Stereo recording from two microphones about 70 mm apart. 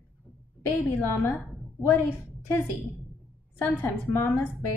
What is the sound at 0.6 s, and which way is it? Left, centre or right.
A woman's voice, left.